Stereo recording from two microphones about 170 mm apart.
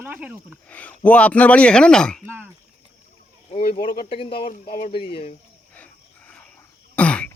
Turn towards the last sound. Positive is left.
turn(degrees=5)  # may be behind; listen again after turning